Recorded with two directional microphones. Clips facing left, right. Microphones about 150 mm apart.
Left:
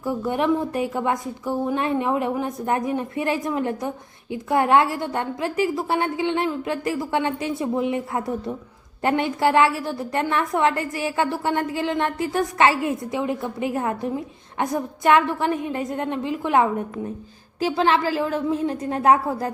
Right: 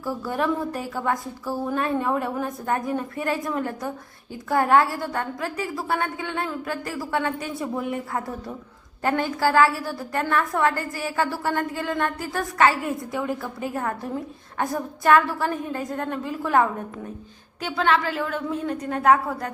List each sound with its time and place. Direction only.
0.0 s a woman's voice: 20° left (ahead or behind)
17.6 s a woman's voice: 30° left (ahead or behind)